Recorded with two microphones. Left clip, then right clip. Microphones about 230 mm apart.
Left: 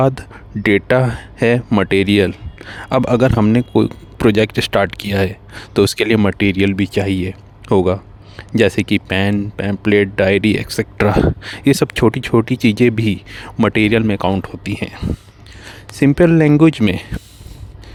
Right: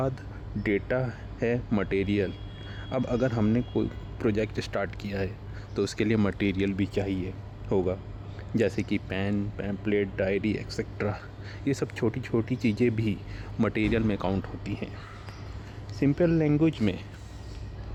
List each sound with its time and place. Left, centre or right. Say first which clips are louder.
0.0 s speech: left 15 dB; left